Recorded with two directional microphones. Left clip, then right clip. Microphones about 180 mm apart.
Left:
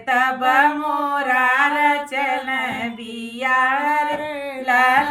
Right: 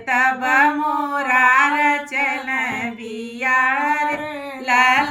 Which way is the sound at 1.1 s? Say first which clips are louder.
Right 3 dB; 20° left (ahead or behind).